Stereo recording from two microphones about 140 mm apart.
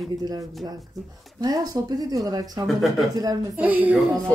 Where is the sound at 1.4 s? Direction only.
25° right (ahead or behind).